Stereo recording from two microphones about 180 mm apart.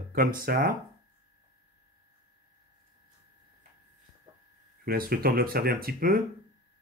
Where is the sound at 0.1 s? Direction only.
50° right (ahead or behind).